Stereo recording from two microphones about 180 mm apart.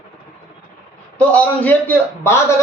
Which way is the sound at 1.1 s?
10° left (ahead or behind).